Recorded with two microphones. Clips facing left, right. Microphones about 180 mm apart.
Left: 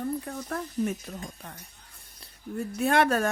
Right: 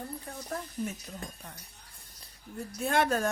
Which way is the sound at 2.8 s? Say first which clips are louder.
Left 4 dB; 70° left (ahead or behind).